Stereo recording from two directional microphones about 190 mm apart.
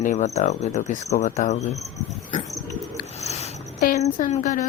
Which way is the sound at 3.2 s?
35° left (ahead or behind).